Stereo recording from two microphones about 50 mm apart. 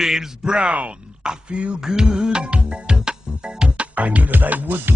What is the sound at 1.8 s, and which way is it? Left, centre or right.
Music, centre.